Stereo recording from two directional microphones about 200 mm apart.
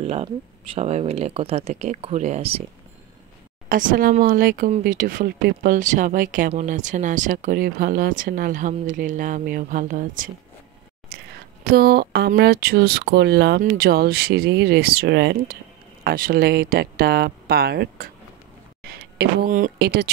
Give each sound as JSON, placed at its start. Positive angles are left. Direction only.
{"t": 0.0, "sound": "speech", "side_deg": -30}
{"t": 3.6, "sound": "speech", "side_deg": -45}
{"t": 11.1, "sound": "a sound", "side_deg": -50}
{"t": 11.6, "sound": "speech", "side_deg": -50}